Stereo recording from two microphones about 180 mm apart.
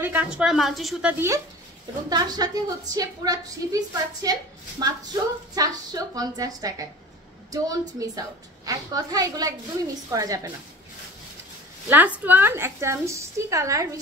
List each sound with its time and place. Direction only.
0.0 s a woman's voice: 10° right (ahead or behind)
1.1 s a woman's voice: 15° right (ahead or behind)
11.9 s a woman's voice: 10° right (ahead or behind)